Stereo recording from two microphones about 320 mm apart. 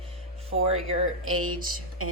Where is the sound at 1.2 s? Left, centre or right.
Right.